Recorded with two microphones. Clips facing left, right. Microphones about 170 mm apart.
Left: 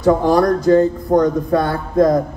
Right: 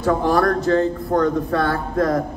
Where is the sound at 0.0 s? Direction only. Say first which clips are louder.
Left 4 dB; 15° left (ahead or behind).